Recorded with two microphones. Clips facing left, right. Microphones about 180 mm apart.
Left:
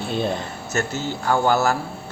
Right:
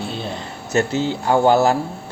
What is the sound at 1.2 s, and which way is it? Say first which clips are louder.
Speech: right 4 dB; 20° right (ahead or behind).